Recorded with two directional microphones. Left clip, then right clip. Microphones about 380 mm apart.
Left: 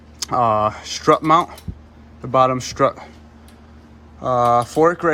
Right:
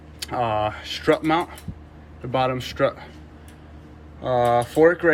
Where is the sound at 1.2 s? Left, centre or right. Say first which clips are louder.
Left 7 dB; centre.